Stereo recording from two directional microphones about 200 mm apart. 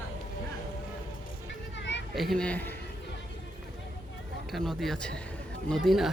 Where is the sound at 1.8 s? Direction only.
60° left (ahead or behind).